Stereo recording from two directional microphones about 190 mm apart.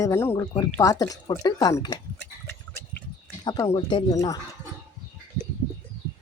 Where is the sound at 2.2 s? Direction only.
10° left (ahead or behind).